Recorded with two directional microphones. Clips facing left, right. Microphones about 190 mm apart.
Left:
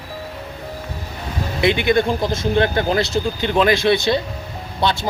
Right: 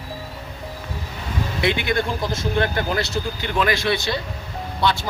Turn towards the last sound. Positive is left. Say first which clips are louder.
# left 1 dB
turn(degrees=20)  # may be behind; listen again after turning